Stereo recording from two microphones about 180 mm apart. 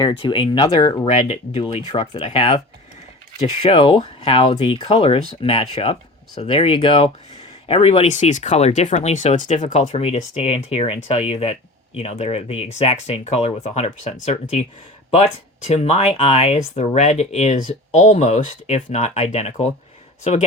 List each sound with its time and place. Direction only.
0.0 s speech: 25° left (ahead or behind)
3.6 s speech: 30° left (ahead or behind)
15.7 s speech: 35° left (ahead or behind)